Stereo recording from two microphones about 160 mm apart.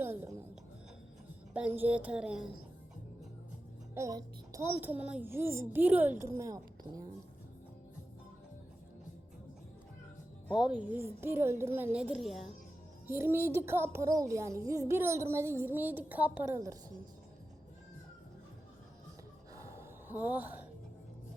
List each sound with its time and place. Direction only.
0.0 s music: 15° right (ahead or behind)
1.5 s a child's voice: 10° right (ahead or behind)
3.9 s a child's voice: 20° right (ahead or behind)
10.5 s a child's voice: 5° right (ahead or behind)
13.1 s a child's voice: 15° right (ahead or behind)
19.5 s gasp: 15° right (ahead or behind)